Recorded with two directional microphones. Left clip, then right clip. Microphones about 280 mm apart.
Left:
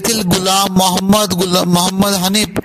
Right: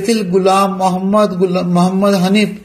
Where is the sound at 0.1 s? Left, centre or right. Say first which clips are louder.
Right 4 dB; left.